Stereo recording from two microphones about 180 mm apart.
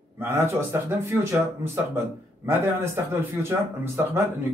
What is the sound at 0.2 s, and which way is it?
Speech, 15° right (ahead or behind).